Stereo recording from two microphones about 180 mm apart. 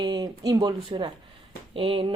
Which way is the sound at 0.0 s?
20° right (ahead or behind).